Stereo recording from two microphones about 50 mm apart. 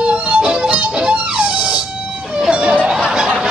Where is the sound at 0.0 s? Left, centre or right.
Right.